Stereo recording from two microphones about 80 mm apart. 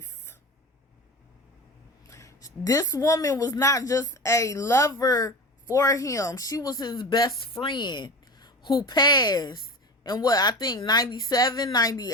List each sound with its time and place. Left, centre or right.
0.0 s a sound: left
2.0 s a woman's voice: left
7.6 s a woman's voice: left